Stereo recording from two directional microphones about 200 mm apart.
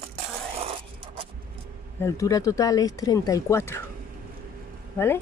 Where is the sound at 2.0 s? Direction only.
15° left (ahead or behind).